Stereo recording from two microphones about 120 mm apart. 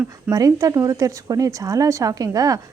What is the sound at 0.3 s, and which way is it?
A woman's voice, 30° right (ahead or behind).